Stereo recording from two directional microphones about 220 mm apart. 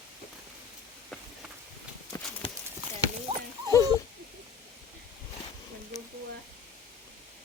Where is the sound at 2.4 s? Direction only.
25° left (ahead or behind).